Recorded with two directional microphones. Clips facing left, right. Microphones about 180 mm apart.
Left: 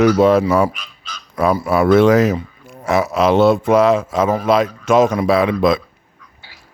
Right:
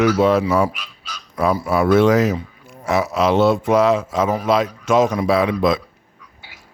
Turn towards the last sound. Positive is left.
turn(degrees=65)  # may be behind; listen again after turning